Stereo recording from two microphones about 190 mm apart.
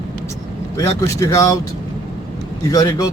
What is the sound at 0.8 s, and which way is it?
Speech, 15° left (ahead or behind).